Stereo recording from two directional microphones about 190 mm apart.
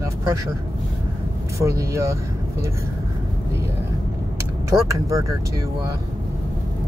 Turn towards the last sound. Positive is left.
turn(degrees=-15)  # may be behind; listen again after turning